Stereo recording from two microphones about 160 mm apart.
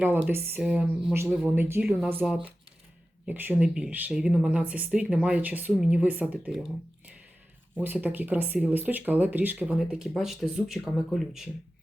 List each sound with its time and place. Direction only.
0.0 s speech: 15° right (ahead or behind)
2.2 s speech: 5° right (ahead or behind)
7.8 s speech: 10° right (ahead or behind)